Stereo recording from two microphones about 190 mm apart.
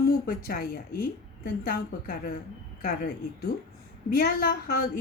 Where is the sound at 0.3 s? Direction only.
50° left (ahead or behind).